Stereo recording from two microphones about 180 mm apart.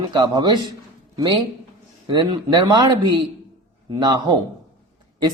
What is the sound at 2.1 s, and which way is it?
A man's voice, 25° right (ahead or behind).